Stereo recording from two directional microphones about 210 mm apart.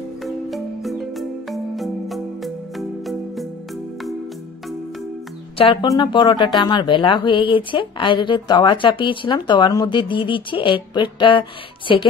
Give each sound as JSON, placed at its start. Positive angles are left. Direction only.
{"t": 0.2, "sound": "music", "side_deg": 0}
{"t": 5.6, "sound": "speech", "side_deg": 25}